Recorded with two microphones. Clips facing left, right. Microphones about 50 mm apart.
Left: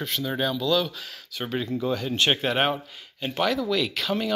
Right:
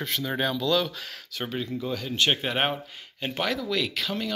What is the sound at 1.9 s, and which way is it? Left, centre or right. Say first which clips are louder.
Speech: left 1 dB; left.